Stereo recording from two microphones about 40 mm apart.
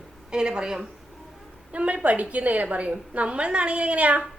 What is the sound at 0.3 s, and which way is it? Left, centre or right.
Speech, right.